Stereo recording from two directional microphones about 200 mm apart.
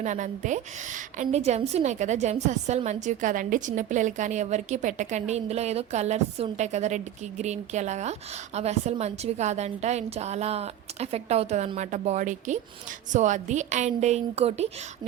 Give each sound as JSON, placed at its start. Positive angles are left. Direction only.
{"t": 0.0, "sound": "a woman's voice", "side_deg": -40}